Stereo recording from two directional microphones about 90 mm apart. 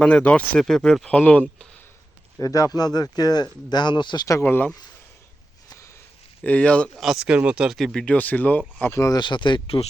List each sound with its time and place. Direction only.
0.0 s speech: 15° left (ahead or behind)
2.4 s speech: 40° left (ahead or behind)
4.3 s speech: 35° left (ahead or behind)
6.4 s speech: 15° left (ahead or behind)
7.0 s speech: 5° right (ahead or behind)
7.9 s speech: 15° left (ahead or behind)
8.9 s speech: 35° left (ahead or behind)
9.1 s speech: 60° left (ahead or behind); by 9.8 s 75° left (ahead or behind)